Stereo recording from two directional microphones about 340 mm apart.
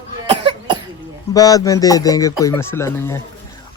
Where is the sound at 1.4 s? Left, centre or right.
Centre.